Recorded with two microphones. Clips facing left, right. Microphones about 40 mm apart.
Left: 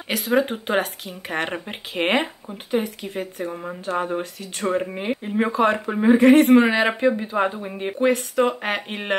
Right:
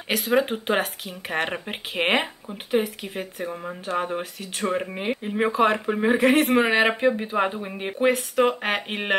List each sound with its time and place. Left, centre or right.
0.1 s speech: centre
7.2 s speech: centre